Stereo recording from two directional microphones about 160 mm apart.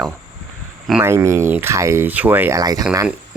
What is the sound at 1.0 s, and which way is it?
Speech, 15° right (ahead or behind).